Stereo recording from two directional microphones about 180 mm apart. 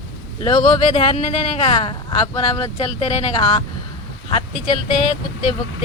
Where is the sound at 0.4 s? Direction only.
30° left (ahead or behind).